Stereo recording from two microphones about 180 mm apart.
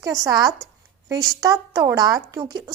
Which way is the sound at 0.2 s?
20° right (ahead or behind).